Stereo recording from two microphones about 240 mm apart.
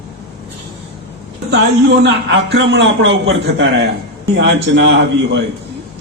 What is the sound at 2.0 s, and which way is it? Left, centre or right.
A man's voice, right.